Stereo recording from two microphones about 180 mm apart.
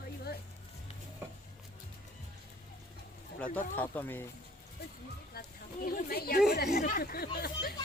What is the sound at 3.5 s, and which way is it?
Speech, 10° left (ahead or behind).